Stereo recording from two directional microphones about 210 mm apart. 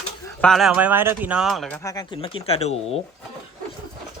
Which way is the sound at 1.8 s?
15° left (ahead or behind).